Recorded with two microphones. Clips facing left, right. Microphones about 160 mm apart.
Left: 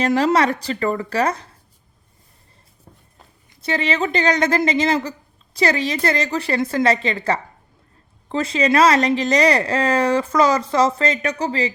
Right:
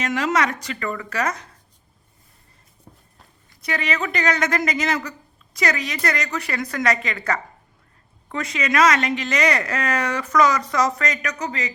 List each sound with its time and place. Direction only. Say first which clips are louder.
0.0 s speech: left 5 dB; 35° left (ahead or behind)
3.5 s a woman's voice: left 4 dB; 30° left (ahead or behind)